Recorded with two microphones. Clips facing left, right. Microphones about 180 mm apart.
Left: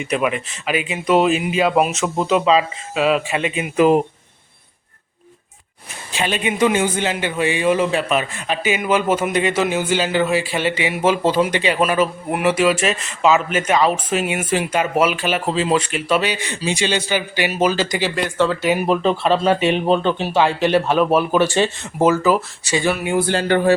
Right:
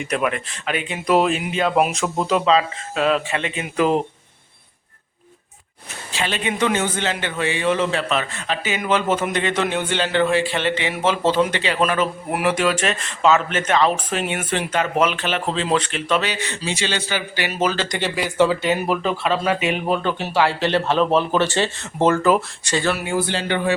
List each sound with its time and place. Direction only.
0.0 s speech: 5° left (ahead or behind)
6.1 s a man's voice: 15° left (ahead or behind)
18.1 s speech: 5° right (ahead or behind)
18.6 s a man's voice: 10° left (ahead or behind)
18.9 s a man's voice: 25° left (ahead or behind); by 22.7 s 5° left (ahead or behind)
22.7 s a man's voice: 15° left (ahead or behind)
23.3 s speech: 45° left (ahead or behind)